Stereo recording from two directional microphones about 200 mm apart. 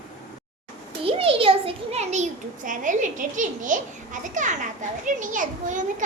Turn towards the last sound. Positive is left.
turn(degrees=-40)  # may be behind; listen again after turning